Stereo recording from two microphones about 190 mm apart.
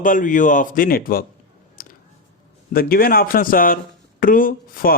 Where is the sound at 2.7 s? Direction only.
50° left (ahead or behind).